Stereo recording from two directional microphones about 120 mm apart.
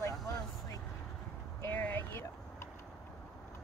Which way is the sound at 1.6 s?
15° left (ahead or behind).